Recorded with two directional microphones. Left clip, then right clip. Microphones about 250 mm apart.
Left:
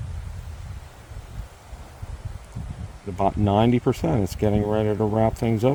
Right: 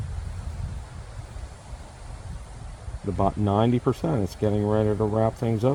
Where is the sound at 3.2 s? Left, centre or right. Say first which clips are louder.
Left 3 dB; left.